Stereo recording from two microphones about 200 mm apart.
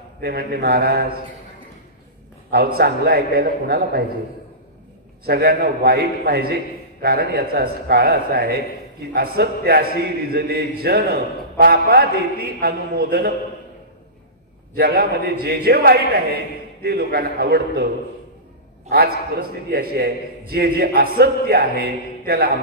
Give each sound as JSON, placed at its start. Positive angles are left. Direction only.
{"t": 0.2, "sound": "a man's voice", "side_deg": -50}
{"t": 2.5, "sound": "a man's voice", "side_deg": -50}
{"t": 5.2, "sound": "a man's voice", "side_deg": -50}
{"t": 14.8, "sound": "a man's voice", "side_deg": -50}
{"t": 18.9, "sound": "a man's voice", "side_deg": -50}